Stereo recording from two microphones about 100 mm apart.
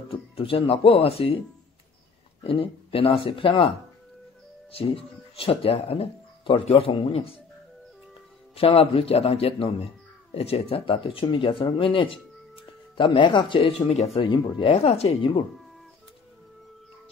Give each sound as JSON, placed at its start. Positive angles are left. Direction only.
{"t": 0.4, "sound": "speech", "side_deg": 70}
{"t": 2.4, "sound": "speech", "side_deg": 70}
{"t": 4.7, "sound": "speech", "side_deg": 70}
{"t": 8.5, "sound": "speech", "side_deg": 65}